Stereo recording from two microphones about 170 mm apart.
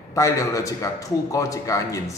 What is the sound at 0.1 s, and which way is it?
A man's voice, 20° left (ahead or behind).